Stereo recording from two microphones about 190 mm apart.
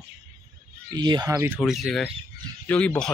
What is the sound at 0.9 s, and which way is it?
Speech, 20° right (ahead or behind).